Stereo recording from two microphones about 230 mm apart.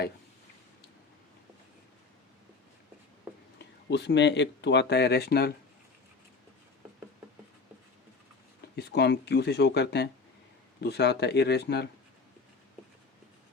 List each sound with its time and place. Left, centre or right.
3.8 s speech: left
8.7 s speech: left